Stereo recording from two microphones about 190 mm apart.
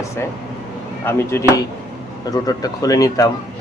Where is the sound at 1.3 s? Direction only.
15° left (ahead or behind).